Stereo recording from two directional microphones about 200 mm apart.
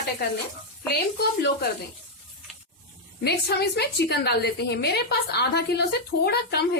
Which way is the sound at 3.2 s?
55° left (ahead or behind).